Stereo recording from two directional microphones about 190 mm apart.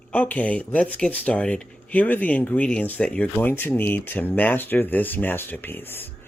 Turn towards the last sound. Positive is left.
turn(degrees=10)  # may be behind; listen again after turning